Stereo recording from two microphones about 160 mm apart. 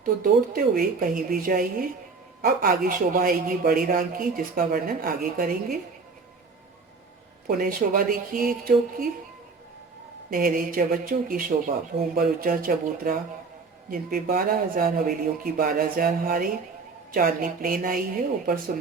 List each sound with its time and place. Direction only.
0.0 s speech: 60° right (ahead or behind)
7.4 s speech: 65° right (ahead or behind)
10.2 s speech: 60° right (ahead or behind)